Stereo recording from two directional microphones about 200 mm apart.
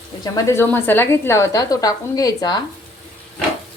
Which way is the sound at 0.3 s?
15° left (ahead or behind).